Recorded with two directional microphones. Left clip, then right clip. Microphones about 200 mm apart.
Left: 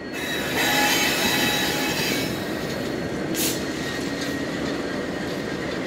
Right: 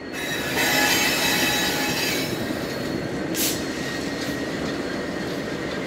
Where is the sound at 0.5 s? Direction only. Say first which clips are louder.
Even; 15° right (ahead or behind).